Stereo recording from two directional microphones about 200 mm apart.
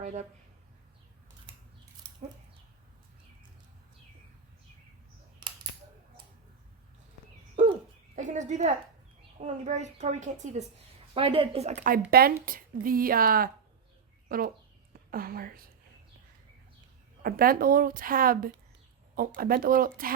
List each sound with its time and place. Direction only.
0.0 s speech: 35° right (ahead or behind)
7.6 s bird: 35° right (ahead or behind)
8.1 s a woman's voice: 35° right (ahead or behind)
12.1 s speech: 45° right (ahead or behind)
17.2 s speech: 45° right (ahead or behind)